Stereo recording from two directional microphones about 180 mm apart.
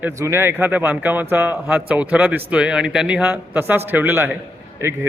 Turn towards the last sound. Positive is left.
turn(degrees=-15)  # may be behind; listen again after turning